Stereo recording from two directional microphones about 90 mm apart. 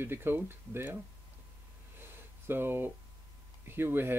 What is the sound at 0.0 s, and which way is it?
Speech, 25° right (ahead or behind).